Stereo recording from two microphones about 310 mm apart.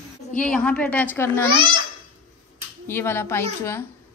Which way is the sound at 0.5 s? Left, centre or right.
Centre.